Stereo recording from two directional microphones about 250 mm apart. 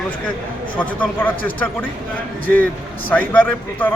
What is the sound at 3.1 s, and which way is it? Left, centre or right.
Speech, centre.